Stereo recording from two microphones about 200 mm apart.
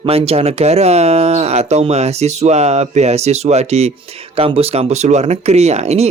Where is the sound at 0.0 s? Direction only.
30° right (ahead or behind).